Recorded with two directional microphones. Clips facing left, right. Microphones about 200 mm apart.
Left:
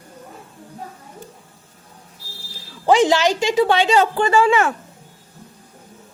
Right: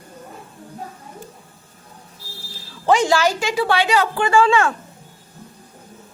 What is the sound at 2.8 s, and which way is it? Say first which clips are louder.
A woman's voice: left 2 dB; 15° left (ahead or behind).